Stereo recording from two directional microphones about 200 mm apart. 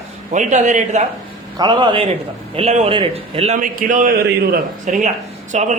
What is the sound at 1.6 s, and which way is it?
A man's voice, 20° right (ahead or behind).